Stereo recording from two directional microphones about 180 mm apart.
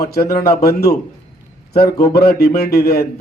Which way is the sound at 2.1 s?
60° left (ahead or behind).